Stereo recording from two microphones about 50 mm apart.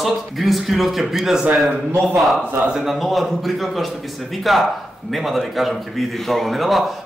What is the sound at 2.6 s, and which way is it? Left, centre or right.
Speech, centre.